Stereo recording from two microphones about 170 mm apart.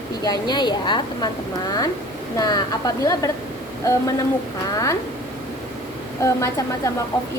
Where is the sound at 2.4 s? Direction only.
25° left (ahead or behind).